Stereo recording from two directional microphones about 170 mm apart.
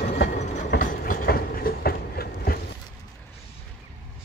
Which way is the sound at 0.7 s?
55° left (ahead or behind).